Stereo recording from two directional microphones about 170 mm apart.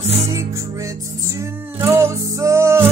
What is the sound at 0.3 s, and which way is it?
Music, 20° right (ahead or behind).